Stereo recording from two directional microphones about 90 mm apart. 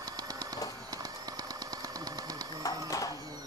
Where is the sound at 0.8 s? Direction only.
45° right (ahead or behind).